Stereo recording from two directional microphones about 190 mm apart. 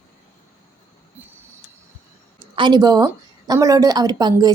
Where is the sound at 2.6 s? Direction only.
25° right (ahead or behind).